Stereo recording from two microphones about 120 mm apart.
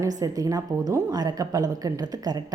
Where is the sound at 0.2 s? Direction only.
30° right (ahead or behind).